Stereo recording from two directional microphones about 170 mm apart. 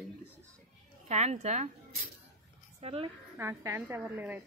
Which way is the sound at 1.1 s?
40° right (ahead or behind).